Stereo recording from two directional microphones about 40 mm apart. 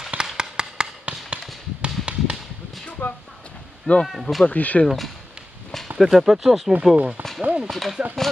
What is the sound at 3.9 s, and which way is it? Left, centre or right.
Speech, left.